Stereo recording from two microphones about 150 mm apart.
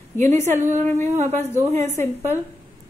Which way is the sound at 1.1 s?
50° right (ahead or behind).